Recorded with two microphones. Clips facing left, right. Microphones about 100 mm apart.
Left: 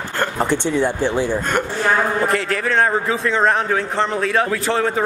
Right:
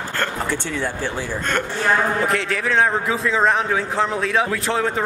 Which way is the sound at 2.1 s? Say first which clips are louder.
Left 2 dB; centre (ahead or behind).